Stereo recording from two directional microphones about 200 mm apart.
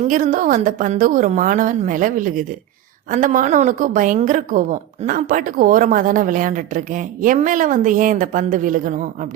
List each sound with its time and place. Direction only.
0.0 s a woman's voice: 40° right (ahead or behind)